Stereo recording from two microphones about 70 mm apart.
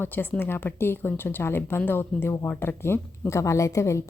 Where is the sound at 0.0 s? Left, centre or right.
Left.